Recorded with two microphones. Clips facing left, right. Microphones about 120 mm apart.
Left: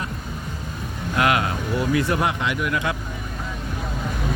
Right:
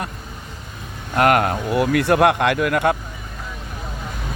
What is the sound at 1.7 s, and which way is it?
Speech, 70° right (ahead or behind).